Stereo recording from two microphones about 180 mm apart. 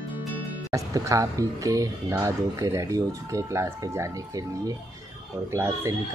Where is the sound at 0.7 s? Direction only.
15° right (ahead or behind).